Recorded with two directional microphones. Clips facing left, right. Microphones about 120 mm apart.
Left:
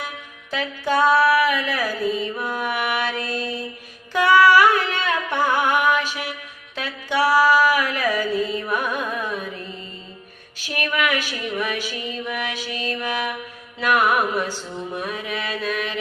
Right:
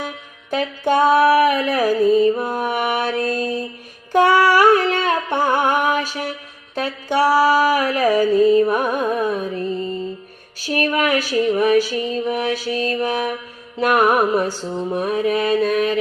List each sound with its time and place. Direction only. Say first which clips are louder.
0.9 s mantra: right 3 dB; 45° right (ahead or behind)
4.1 s music: right 1 dB; 40° right (ahead or behind)
6.7 s mantra: right 4 dB; 40° right (ahead or behind)
10.6 s mantra: right 5 dB; 35° right (ahead or behind)